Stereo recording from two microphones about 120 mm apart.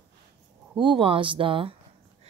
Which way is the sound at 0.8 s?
45° right (ahead or behind).